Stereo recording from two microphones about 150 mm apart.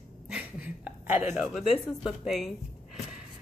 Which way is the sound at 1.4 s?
Centre (ahead or behind).